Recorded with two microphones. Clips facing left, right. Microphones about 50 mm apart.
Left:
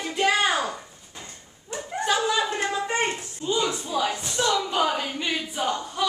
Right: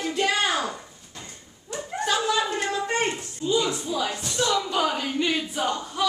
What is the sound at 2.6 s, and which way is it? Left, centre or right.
A woman's voice, centre.